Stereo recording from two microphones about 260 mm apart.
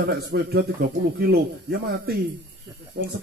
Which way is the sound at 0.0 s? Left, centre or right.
Right.